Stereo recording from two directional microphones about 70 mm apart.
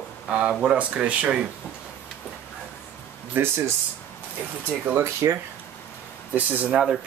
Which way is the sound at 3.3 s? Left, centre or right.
Right.